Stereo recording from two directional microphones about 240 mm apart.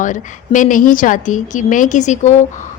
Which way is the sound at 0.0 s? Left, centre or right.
Left.